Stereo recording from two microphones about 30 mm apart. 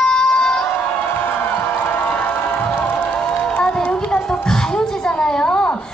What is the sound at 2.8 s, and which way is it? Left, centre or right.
Cheering, left.